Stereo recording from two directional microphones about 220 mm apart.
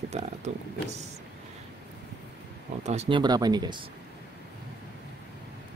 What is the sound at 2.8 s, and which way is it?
Speech, 30° right (ahead or behind).